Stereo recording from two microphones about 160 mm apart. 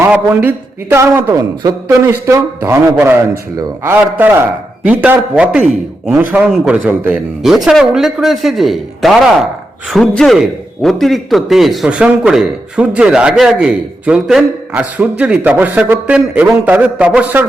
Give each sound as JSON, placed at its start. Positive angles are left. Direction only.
{"t": 0.0, "sound": "a man's voice", "side_deg": -10}